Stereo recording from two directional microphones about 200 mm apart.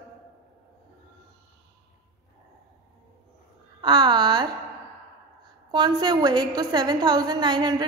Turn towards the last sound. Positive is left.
turn(degrees=-20)  # may be behind; listen again after turning